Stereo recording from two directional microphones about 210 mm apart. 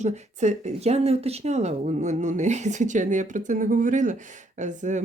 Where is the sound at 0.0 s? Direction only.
35° right (ahead or behind).